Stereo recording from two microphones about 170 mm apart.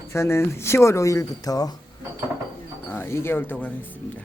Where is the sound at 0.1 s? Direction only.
15° left (ahead or behind).